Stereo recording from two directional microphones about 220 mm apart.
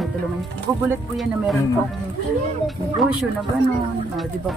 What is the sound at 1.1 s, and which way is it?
Speech, centre (ahead or behind).